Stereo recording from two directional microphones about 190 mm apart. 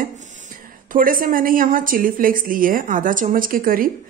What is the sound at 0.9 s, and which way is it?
Speech, 45° right (ahead or behind).